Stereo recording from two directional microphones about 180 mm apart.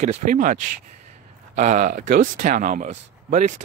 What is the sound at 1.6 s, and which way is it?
Speech, 40° right (ahead or behind).